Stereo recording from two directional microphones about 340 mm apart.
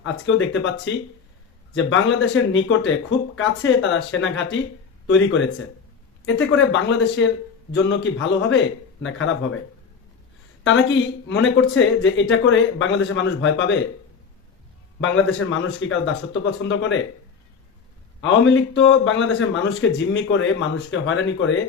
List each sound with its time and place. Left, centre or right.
0.0 s speech: left
10.6 s speech: left
15.0 s speech: left
18.2 s speech: left